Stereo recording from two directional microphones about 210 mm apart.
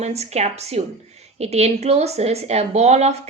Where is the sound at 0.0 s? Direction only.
30° right (ahead or behind).